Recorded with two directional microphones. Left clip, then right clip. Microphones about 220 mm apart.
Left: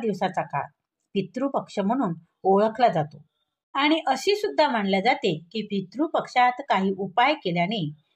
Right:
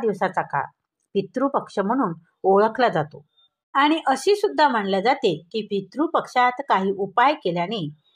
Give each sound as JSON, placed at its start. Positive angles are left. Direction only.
{"t": 0.0, "sound": "speech", "side_deg": -15}